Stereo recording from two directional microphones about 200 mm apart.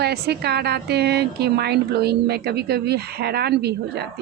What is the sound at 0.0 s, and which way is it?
Speech, 55° right (ahead or behind).